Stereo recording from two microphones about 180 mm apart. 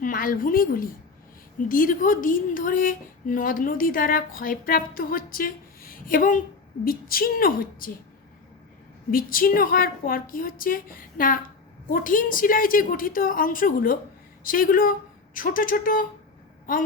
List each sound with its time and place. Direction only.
0.0 s a woman's voice: 50° left (ahead or behind)
9.0 s a woman's voice: 50° left (ahead or behind)